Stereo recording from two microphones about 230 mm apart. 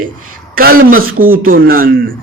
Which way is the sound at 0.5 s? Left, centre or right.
Right.